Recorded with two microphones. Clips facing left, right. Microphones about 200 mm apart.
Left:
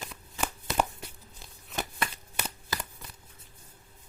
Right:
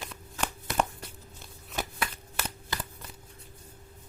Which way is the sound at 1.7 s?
5° right (ahead or behind).